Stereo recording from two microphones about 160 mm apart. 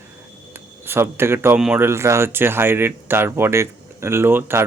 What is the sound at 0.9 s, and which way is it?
Speech, 15° right (ahead or behind).